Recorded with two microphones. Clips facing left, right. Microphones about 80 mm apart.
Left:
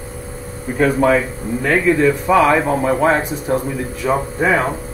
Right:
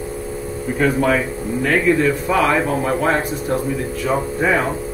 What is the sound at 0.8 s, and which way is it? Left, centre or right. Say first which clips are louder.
A man's voice: left 3 dB; centre.